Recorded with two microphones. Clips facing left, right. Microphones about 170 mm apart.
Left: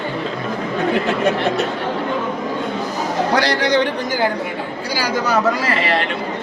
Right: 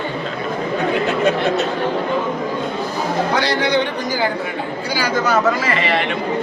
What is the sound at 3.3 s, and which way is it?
Speech, 40° left (ahead or behind).